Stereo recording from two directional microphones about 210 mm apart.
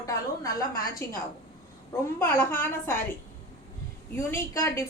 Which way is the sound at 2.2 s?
10° left (ahead or behind).